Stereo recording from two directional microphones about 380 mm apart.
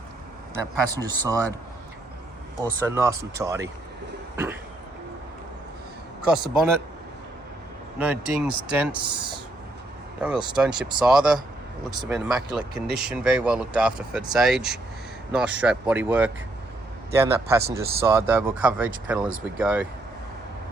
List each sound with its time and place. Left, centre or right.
0.5 s speech: centre
2.6 s speech: centre
6.2 s speech: centre
7.9 s speech: centre
10.2 s speech: centre